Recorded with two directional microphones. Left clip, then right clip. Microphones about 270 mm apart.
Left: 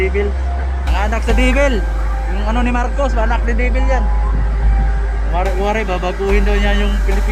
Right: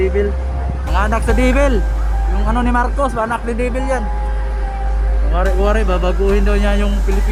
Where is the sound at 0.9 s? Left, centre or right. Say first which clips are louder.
Right 2 dB; centre.